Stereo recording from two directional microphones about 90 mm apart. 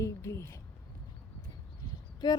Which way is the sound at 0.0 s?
35° left (ahead or behind).